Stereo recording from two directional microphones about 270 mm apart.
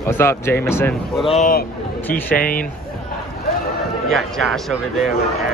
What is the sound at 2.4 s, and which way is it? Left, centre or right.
Speech, left.